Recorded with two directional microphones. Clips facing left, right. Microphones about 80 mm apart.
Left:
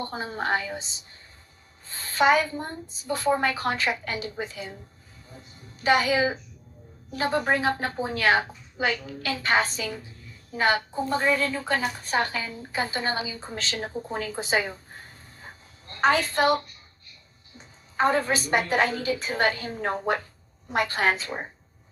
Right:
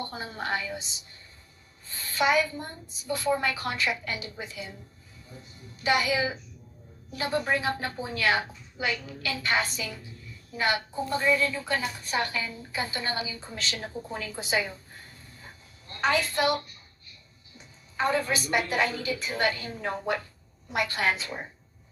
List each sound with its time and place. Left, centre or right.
0.0 s a woman's voice: left
5.8 s a woman's voice: left